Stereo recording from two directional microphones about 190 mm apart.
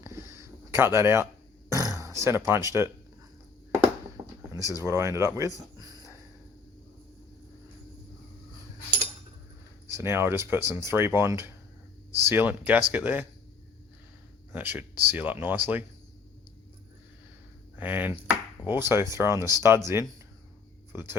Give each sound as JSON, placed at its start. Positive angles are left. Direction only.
{"t": 0.0, "sound": "a sound", "side_deg": -15}
{"t": 1.9, "sound": "speech", "side_deg": -15}
{"t": 4.5, "sound": "speech", "side_deg": -15}
{"t": 5.5, "sound": "a sound", "side_deg": -20}
{"t": 9.9, "sound": "speech", "side_deg": -15}
{"t": 14.5, "sound": "speech", "side_deg": -10}
{"t": 17.7, "sound": "chopping", "side_deg": -10}
{"t": 18.6, "sound": "speech", "side_deg": -10}